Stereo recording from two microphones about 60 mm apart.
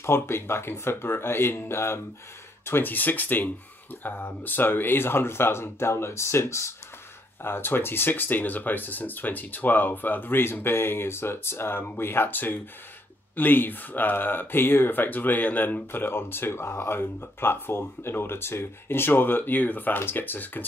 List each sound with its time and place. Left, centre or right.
0.0 s speech: left
7.4 s speech: left